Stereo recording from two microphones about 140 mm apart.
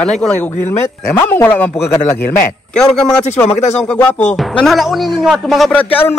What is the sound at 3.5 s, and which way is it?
Speech, 55° left (ahead or behind).